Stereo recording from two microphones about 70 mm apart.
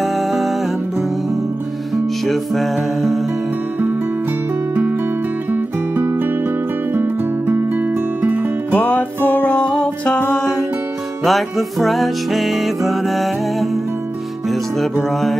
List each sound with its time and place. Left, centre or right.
0.0 s music: centre
2.2 s music: centre
5.5 s music: right
8.7 s music: left
11.2 s music: centre